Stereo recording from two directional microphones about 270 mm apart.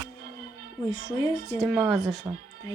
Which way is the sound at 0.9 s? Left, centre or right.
Centre.